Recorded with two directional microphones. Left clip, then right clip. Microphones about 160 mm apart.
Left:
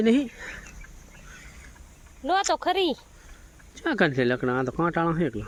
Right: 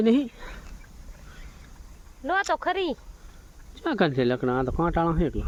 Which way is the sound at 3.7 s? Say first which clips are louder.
Left 1 dB; centre (ahead or behind).